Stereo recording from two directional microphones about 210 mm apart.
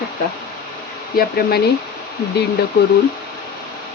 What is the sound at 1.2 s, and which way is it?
Speech, 45° left (ahead or behind).